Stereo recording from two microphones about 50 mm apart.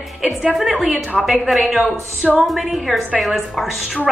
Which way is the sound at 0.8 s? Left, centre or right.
Right.